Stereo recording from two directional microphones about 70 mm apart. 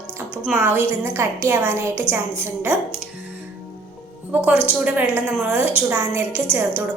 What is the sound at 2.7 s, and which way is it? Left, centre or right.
Speech, right.